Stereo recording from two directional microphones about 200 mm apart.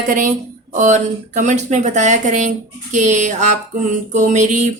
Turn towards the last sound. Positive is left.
turn(degrees=-35)  # may be behind; listen again after turning